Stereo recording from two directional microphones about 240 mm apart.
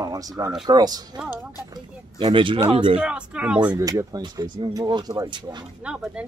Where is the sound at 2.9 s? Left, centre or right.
Centre.